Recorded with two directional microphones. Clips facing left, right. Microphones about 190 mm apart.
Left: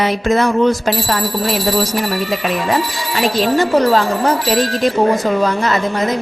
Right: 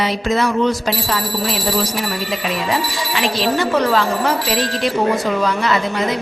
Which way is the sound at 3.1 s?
40° left (ahead or behind).